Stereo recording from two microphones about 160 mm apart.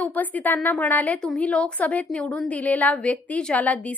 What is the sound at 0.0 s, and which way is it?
A woman's voice, 10° left (ahead or behind).